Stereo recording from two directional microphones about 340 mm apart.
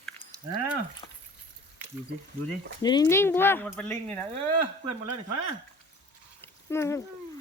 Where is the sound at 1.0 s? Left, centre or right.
Centre.